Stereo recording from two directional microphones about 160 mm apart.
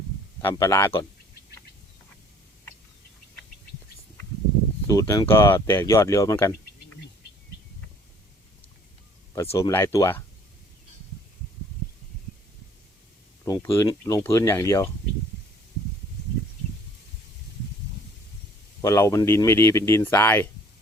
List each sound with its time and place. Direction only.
0.4 s speech: 15° left (ahead or behind)
4.9 s speech: 20° left (ahead or behind)
9.3 s speech: 20° left (ahead or behind)
13.4 s speech: 20° left (ahead or behind)
18.8 s speech: 20° left (ahead or behind)